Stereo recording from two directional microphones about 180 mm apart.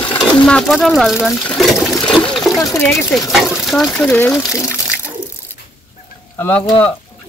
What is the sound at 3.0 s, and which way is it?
Speech, 5° left (ahead or behind).